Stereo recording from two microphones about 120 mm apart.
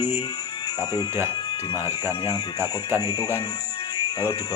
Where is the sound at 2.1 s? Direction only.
20° right (ahead or behind).